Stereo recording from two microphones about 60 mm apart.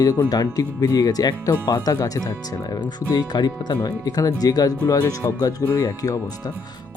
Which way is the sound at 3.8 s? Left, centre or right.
Left.